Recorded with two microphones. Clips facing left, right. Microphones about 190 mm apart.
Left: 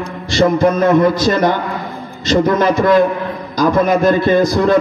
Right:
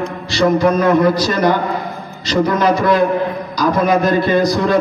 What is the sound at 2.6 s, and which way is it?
A man's voice, 45° left (ahead or behind).